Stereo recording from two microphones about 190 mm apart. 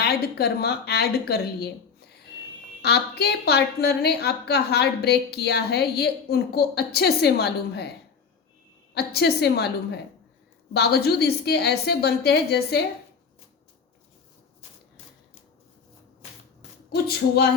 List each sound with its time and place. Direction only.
0.0 s a woman's voice: 55° left (ahead or behind)
9.0 s a woman's voice: 60° left (ahead or behind)
16.9 s a woman's voice: 55° left (ahead or behind)